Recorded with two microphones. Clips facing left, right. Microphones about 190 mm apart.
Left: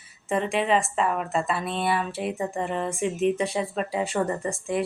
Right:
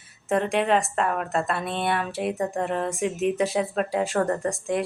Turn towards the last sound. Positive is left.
turn(degrees=0)  # may be behind; listen again after turning